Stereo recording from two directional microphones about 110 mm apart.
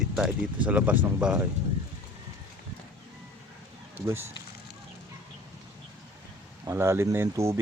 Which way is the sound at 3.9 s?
25° right (ahead or behind).